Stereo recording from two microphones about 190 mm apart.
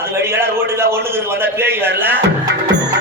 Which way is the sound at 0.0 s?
15° right (ahead or behind).